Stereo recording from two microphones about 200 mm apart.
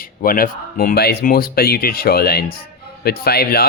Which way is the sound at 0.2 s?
45° left (ahead or behind).